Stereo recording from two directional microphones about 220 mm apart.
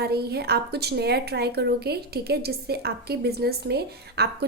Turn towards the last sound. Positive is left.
turn(degrees=-50)  # may be behind; listen again after turning